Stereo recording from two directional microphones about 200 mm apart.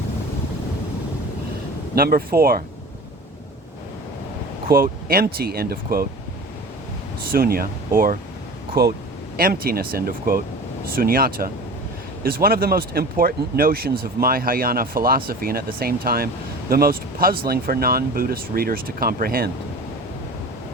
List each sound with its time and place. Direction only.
2.0 s speech: 50° right (ahead or behind)
4.7 s speech: 45° right (ahead or behind)
7.3 s speech: 50° right (ahead or behind)